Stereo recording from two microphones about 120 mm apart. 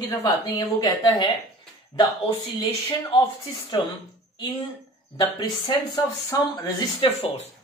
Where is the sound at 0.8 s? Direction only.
35° left (ahead or behind).